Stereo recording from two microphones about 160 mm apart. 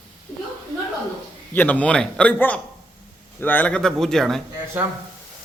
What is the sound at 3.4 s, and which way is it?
Speech, 10° left (ahead or behind).